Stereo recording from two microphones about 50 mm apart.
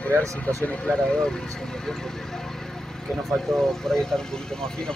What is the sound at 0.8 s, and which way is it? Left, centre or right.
Speech, centre.